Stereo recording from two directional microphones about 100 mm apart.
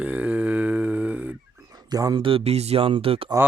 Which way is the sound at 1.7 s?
40° right (ahead or behind).